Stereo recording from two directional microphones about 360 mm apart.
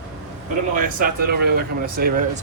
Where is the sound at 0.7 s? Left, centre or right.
Right.